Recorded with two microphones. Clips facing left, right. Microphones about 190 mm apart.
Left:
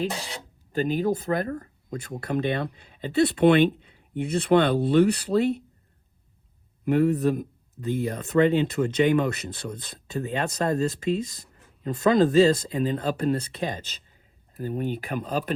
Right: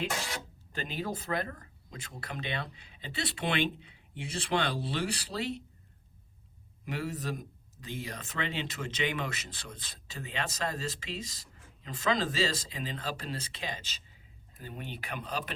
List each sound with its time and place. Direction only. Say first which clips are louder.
0.8 s speech: left 12 dB; 45° left (ahead or behind)
6.8 s speech: left 15 dB; 55° left (ahead or behind)